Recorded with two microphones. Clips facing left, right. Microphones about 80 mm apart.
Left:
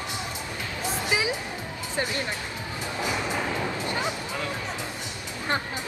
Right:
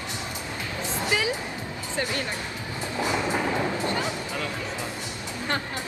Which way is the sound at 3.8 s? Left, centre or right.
Left.